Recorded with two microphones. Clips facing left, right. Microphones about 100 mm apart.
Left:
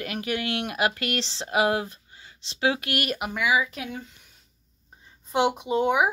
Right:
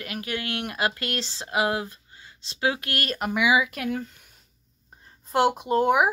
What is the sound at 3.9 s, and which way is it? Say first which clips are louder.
Speech: right 7 dB; centre (ahead or behind).